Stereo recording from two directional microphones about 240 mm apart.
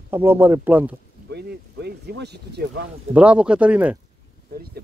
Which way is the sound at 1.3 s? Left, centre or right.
Right.